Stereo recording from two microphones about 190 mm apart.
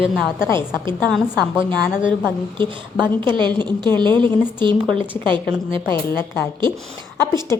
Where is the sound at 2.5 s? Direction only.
25° right (ahead or behind).